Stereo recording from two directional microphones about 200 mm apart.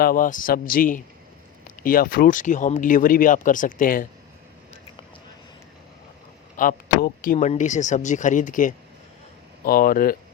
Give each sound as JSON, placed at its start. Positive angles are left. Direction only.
{"t": 0.0, "sound": "a man's voice", "side_deg": 45}
{"t": 6.6, "sound": "a man's voice", "side_deg": 45}